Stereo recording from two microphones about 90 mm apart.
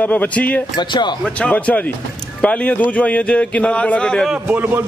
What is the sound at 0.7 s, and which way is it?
Speech, 55° left (ahead or behind).